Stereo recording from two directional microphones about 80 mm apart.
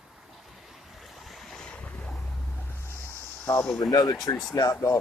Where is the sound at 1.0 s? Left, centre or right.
Centre.